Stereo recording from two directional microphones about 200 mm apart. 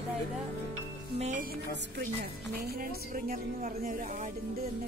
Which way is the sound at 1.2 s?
40° right (ahead or behind).